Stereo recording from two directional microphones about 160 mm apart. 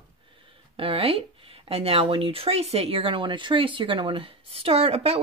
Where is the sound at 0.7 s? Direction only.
35° right (ahead or behind).